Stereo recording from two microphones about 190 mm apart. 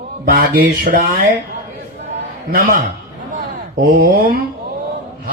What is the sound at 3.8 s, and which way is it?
Speech, 45° right (ahead or behind).